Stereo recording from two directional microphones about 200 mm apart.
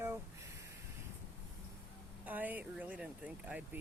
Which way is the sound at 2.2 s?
10° right (ahead or behind).